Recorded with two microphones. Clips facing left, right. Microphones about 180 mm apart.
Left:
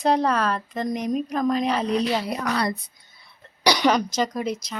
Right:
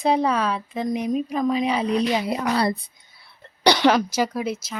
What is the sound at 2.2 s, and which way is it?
Speech, 25° right (ahead or behind).